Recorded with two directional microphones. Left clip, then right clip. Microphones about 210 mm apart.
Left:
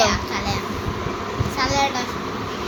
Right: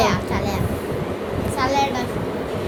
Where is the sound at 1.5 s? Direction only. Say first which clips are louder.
Right 1 dB; 40° right (ahead or behind).